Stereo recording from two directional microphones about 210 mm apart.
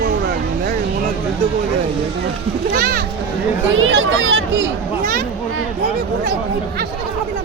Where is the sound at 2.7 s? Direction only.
45° right (ahead or behind).